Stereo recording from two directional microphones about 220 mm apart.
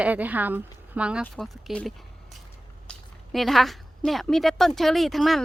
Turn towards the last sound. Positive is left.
turn(degrees=0)  # may be behind; listen again after turning